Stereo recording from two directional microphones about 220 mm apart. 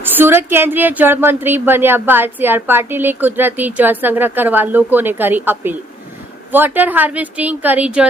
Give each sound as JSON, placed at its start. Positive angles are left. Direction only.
{"t": 0.0, "sound": "a woman's voice", "side_deg": -10}